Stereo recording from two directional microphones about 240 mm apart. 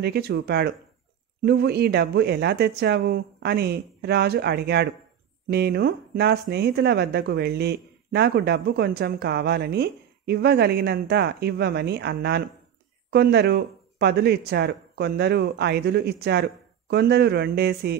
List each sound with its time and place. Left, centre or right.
0.0 s speech: right